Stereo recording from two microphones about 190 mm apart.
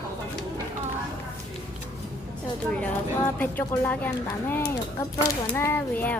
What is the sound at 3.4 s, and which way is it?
Speech, 10° left (ahead or behind).